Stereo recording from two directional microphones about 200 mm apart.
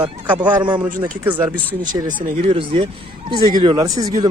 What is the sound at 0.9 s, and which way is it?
Speech, 40° right (ahead or behind).